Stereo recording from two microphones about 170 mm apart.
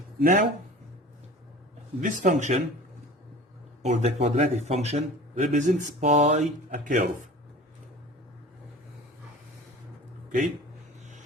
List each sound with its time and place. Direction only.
0.2 s speech: 50° right (ahead or behind)
2.0 s speech: 50° right (ahead or behind)
3.8 s a man's voice: 40° right (ahead or behind)